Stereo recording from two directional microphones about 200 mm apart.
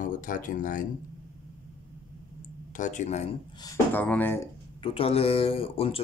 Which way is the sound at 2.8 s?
40° left (ahead or behind).